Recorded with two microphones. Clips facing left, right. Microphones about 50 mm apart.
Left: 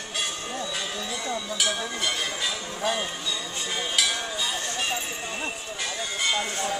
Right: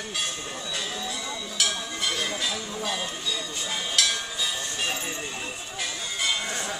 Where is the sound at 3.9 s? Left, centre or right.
Centre.